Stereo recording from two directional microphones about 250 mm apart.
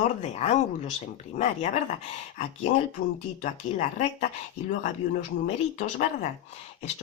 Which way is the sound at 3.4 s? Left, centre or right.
Left.